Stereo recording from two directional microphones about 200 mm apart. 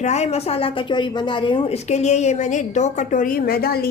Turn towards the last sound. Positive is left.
turn(degrees=50)  # may be behind; listen again after turning